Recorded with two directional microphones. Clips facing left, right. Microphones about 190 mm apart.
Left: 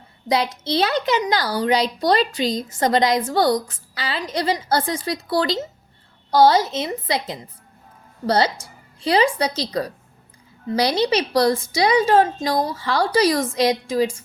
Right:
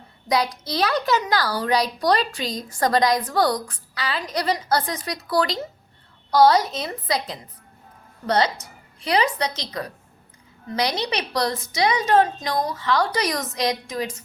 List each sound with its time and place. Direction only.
0.3 s a woman's voice: 25° left (ahead or behind)